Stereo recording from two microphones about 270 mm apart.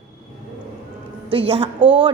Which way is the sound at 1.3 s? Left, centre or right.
Centre.